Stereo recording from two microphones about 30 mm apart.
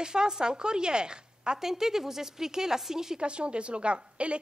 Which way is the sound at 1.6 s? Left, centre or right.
Centre.